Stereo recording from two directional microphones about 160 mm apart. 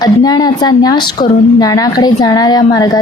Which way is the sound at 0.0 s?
25° left (ahead or behind).